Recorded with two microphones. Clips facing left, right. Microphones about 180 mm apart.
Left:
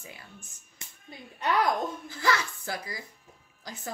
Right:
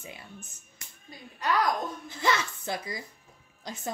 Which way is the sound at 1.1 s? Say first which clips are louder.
Even; 25° left (ahead or behind).